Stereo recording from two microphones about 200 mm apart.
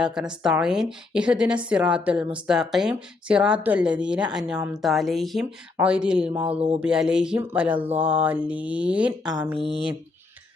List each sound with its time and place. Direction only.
0.0 s speech: 5° right (ahead or behind)
6.4 s mantra: 30° right (ahead or behind)
6.7 s speech: 5° right (ahead or behind)